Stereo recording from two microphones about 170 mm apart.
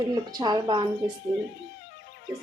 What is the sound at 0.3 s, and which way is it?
Speech, 20° right (ahead or behind).